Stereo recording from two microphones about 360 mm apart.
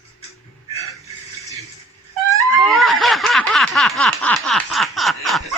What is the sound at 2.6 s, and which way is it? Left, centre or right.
Snicker, centre.